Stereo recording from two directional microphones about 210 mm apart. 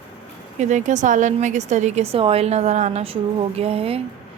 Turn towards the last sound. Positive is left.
turn(degrees=-30)  # may be behind; listen again after turning